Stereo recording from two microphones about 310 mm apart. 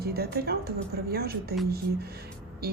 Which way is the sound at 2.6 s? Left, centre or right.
Right.